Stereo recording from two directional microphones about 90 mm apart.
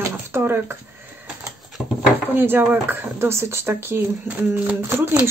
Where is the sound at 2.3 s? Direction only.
20° right (ahead or behind).